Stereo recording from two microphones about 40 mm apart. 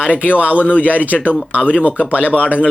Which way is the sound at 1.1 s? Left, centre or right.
Left.